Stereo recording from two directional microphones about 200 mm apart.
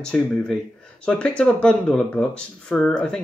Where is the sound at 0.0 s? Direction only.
5° left (ahead or behind).